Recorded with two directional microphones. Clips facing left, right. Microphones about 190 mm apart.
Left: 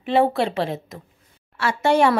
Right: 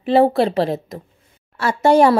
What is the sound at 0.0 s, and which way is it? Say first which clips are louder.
A woman's voice: right 5 dB; 35° right (ahead or behind).